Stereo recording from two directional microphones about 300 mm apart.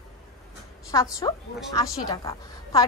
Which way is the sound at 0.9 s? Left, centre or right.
Centre.